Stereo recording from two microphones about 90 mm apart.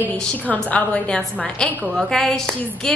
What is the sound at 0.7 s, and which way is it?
A woman's voice, 10° left (ahead or behind).